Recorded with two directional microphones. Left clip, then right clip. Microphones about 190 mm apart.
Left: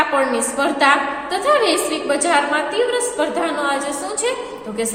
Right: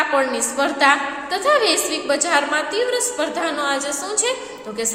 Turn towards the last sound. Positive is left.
turn(degrees=-20)  # may be behind; listen again after turning